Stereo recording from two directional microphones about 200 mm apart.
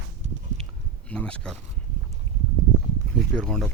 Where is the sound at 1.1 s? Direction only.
5° left (ahead or behind).